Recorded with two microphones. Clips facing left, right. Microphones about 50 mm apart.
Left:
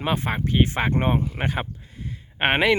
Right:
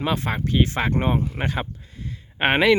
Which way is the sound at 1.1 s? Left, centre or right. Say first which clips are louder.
Even; centre.